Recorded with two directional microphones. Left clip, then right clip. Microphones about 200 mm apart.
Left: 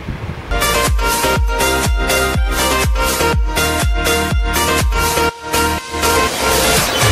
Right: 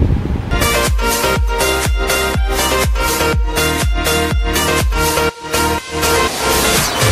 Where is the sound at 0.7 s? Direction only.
Centre (ahead or behind).